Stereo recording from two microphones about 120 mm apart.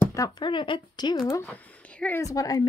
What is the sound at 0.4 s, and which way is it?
Speech, 40° left (ahead or behind).